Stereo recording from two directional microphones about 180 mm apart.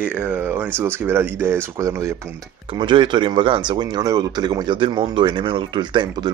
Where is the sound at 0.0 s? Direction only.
5° right (ahead or behind).